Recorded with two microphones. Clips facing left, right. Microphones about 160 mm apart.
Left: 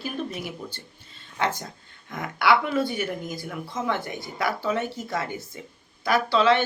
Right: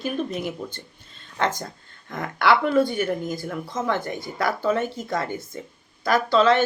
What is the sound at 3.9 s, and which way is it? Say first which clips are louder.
Speech: right 5 dB; 50° right (ahead or behind).